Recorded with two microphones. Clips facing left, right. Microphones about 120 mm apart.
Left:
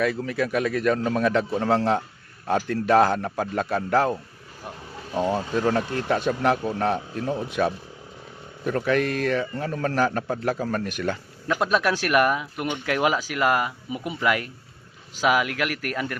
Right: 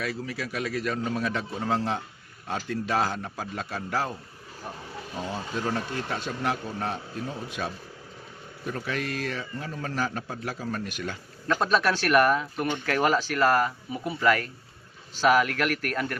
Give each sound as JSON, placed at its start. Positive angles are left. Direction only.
{"t": 0.0, "sound": "a man's voice", "side_deg": 55}
{"t": 2.5, "sound": "a man's voice", "side_deg": 55}
{"t": 5.1, "sound": "a man's voice", "side_deg": 75}
{"t": 11.4, "sound": "speech", "side_deg": 10}